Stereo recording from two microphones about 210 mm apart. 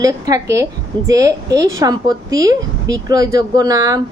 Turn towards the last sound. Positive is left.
turn(degrees=-15)  # may be behind; listen again after turning